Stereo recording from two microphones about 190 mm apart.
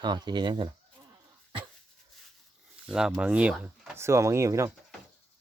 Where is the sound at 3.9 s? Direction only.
15° right (ahead or behind).